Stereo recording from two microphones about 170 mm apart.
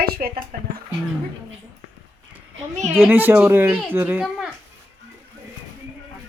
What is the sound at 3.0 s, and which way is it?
Speech, 10° right (ahead or behind).